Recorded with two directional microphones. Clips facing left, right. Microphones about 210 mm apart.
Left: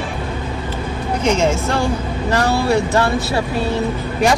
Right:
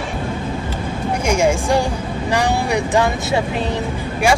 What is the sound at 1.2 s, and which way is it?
Speech, 10° right (ahead or behind).